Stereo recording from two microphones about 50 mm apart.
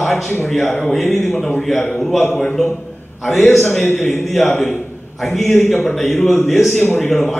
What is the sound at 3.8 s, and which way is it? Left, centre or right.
Speech, left.